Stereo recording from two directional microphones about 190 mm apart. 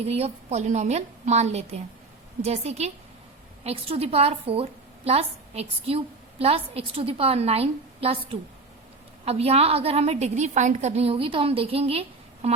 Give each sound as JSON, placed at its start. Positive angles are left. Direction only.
{"t": 0.1, "sound": "a woman's voice", "side_deg": -35}